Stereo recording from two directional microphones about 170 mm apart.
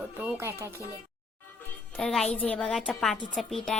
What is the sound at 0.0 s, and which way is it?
Music, 10° right (ahead or behind).